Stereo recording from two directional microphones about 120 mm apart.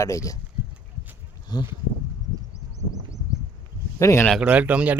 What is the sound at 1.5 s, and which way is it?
Speech, 35° left (ahead or behind).